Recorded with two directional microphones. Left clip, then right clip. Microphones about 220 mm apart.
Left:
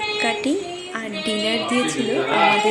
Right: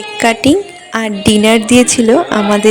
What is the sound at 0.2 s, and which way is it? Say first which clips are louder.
Speech: right 16 dB; 45° right (ahead or behind).